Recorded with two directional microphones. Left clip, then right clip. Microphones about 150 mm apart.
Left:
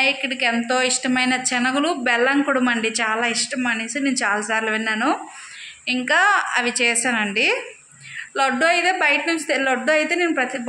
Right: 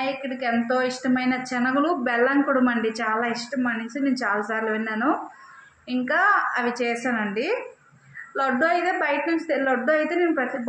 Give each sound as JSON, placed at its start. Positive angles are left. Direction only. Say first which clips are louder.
{"t": 0.0, "sound": "a woman's voice", "louder": "left 7 dB", "side_deg": 25}